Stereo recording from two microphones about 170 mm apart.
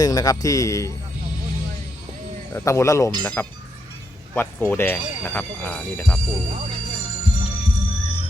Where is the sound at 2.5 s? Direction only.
15° left (ahead or behind).